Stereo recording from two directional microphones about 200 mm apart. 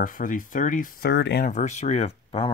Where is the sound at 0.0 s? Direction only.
45° left (ahead or behind).